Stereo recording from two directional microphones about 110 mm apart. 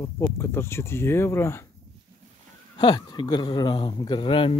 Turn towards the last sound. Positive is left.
turn(degrees=50)  # may be behind; listen again after turning